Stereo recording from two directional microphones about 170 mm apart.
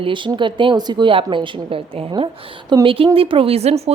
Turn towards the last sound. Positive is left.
turn(degrees=-40)  # may be behind; listen again after turning